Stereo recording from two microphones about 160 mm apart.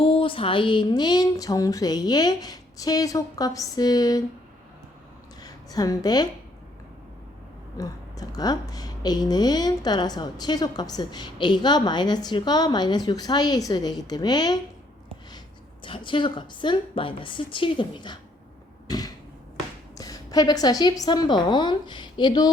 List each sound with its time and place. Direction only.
0.0 s a woman's voice: 35° left (ahead or behind)
5.4 s a woman's voice: 25° left (ahead or behind)
7.8 s a woman's voice: 25° left (ahead or behind)
15.8 s a woman's voice: 30° left (ahead or behind)
18.9 s a sound: 25° left (ahead or behind)
20.0 s a woman's voice: 25° left (ahead or behind)